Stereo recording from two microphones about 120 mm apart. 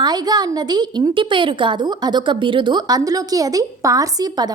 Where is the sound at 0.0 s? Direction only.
35° right (ahead or behind).